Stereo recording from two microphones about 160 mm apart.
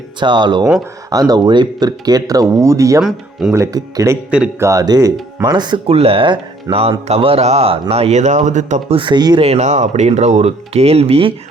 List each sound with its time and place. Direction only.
0.2 s speech: 30° right (ahead or behind)
3.0 s speech: centre (ahead or behind)
3.5 s speech: 20° right (ahead or behind)
4.3 s speech: 5° right (ahead or behind)
4.6 s speech: 20° right (ahead or behind); by 9.0 s 50° right (ahead or behind)
9.0 s speech: 30° right (ahead or behind)
9.4 s speech: 45° right (ahead or behind)